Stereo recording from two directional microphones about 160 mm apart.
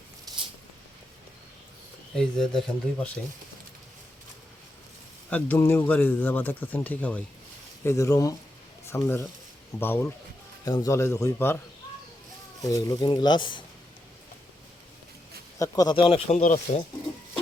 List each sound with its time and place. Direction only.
2.1 s speech: 5° left (ahead or behind)
5.3 s a man's voice: 10° left (ahead or behind)
12.6 s speech: 20° left (ahead or behind)
15.5 s speech: 20° left (ahead or behind); by 16.8 s 50° left (ahead or behind)